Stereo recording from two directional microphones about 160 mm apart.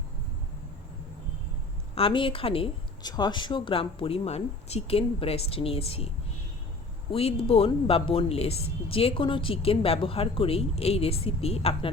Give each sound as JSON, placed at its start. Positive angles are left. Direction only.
{"t": 2.0, "sound": "speech", "side_deg": 35}
{"t": 7.1, "sound": "speech", "side_deg": 35}